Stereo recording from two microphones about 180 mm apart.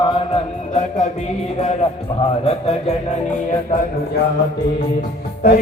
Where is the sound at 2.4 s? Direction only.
35° left (ahead or behind).